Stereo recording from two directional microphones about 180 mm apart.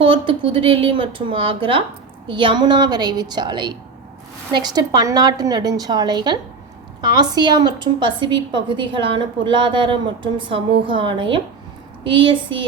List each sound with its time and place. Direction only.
0.0 s a woman's voice: 30° right (ahead or behind)